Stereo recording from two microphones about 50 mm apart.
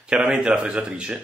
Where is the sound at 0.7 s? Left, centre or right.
Centre.